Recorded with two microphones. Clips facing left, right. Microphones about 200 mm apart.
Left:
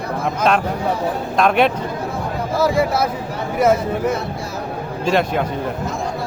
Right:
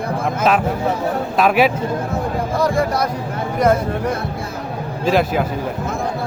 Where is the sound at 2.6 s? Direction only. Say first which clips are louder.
Left 2 dB; 5° left (ahead or behind).